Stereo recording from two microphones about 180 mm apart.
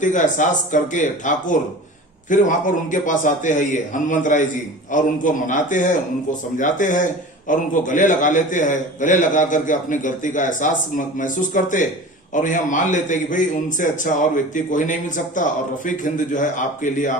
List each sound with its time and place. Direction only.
0.0 s a man's voice: 45° left (ahead or behind)